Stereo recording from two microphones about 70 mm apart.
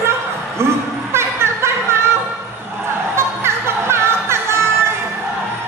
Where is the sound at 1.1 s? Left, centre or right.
Right.